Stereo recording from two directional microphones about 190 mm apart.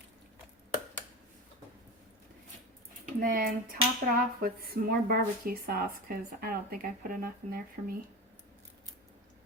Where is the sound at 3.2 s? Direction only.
50° right (ahead or behind).